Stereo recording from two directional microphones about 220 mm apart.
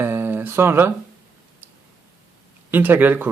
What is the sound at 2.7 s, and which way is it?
Speech, 10° right (ahead or behind).